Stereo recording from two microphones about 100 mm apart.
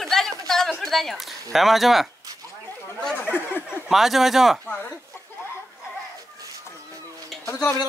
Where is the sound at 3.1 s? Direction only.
20° left (ahead or behind).